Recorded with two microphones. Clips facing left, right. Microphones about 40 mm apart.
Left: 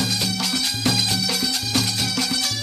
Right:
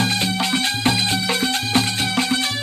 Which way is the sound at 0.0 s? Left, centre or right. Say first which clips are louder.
Right 4 dB; right.